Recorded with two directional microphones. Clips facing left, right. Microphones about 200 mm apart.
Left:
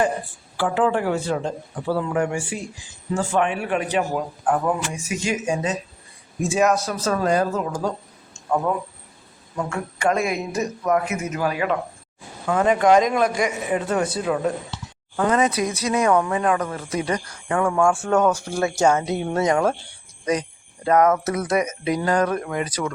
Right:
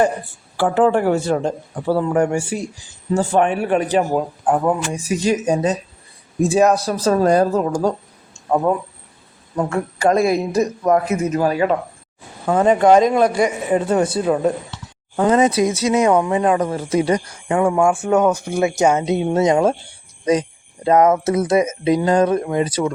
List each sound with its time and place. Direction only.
0.5 s a man's voice: 45° right (ahead or behind)
4.4 s speech: 25° right (ahead or behind)
9.6 s speech: 35° right (ahead or behind)
20.8 s speech: 20° right (ahead or behind)